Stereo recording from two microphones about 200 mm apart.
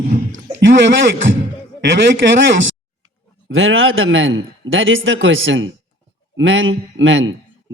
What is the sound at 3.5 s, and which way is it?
A man's voice, 75° right (ahead or behind).